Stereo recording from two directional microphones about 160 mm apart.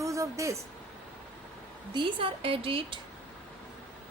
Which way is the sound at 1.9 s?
30° right (ahead or behind).